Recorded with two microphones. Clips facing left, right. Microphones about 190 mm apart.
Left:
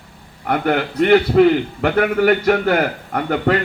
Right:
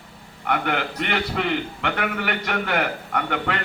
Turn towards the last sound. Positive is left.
turn(degrees=40)  # may be behind; listen again after turning